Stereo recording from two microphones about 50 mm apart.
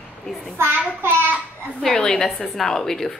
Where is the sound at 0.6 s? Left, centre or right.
Right.